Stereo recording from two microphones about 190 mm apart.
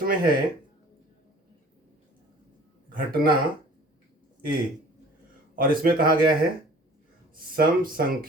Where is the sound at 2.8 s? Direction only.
50° right (ahead or behind).